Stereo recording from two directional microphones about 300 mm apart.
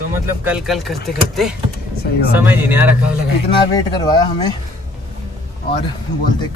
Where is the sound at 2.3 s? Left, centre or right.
Centre.